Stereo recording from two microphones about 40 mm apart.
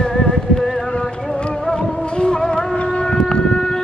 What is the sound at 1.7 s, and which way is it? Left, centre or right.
Music, left.